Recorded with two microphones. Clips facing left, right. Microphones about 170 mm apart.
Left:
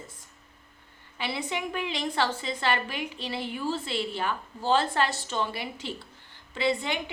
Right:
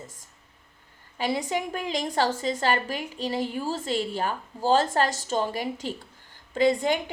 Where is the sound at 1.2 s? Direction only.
40° right (ahead or behind).